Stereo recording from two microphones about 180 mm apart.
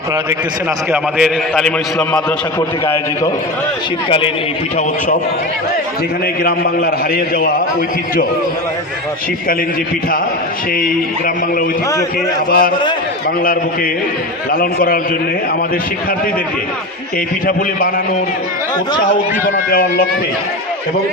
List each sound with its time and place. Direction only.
0.9 s a man's voice: centre (ahead or behind)
6.4 s a man's voice: 60° left (ahead or behind)
12.5 s a man's voice: 55° left (ahead or behind)
14.5 s a man's voice: 55° left (ahead or behind)